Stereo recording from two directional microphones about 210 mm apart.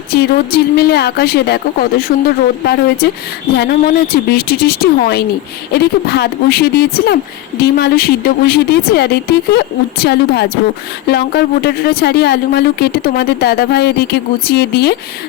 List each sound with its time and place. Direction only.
0.1 s a woman's voice: 50° left (ahead or behind)
3.5 s a woman's voice: 50° left (ahead or behind)